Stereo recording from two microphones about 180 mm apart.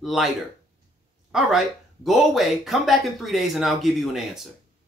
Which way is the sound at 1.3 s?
Centre (ahead or behind).